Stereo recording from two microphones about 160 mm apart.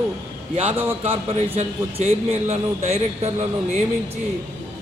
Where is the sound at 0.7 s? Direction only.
10° right (ahead or behind).